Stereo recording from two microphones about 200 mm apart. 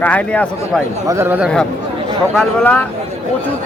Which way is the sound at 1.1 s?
10° right (ahead or behind).